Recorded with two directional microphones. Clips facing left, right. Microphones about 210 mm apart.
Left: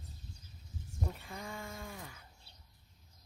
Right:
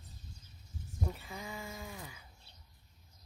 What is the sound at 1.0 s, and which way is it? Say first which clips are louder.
Speech: right 1 dB; centre (ahead or behind).